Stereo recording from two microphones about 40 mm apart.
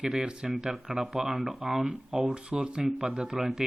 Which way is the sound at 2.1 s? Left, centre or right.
Right.